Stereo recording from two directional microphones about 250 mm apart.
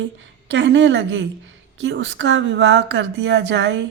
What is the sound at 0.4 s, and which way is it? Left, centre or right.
Speech, right.